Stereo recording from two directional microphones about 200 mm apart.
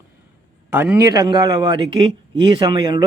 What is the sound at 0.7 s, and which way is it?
Speech, 10° right (ahead or behind).